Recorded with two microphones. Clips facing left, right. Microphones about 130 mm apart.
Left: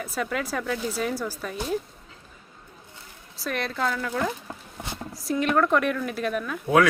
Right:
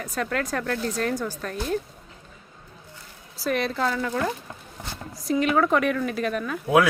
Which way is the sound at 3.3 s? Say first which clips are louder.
Right 4 dB; centre (ahead or behind).